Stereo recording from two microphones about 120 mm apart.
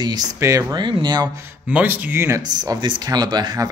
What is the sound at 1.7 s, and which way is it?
Speech, 10° right (ahead or behind).